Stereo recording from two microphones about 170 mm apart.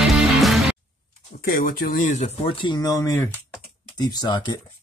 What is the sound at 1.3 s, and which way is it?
Speech, 60° left (ahead or behind).